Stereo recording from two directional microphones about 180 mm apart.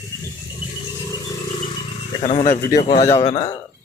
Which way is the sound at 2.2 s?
40° left (ahead or behind).